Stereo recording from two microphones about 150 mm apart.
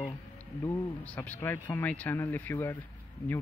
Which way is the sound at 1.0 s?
10° left (ahead or behind).